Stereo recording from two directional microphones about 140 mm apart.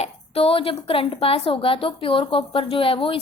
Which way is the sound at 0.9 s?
40° left (ahead or behind).